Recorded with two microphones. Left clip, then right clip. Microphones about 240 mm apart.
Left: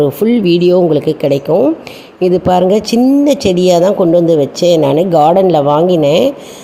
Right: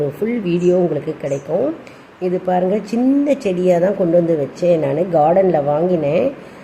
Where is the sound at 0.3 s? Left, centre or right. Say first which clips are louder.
Left 5 dB; left.